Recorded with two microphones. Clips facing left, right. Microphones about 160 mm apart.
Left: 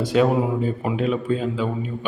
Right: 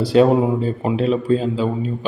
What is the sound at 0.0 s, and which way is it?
A man's voice, 35° right (ahead or behind).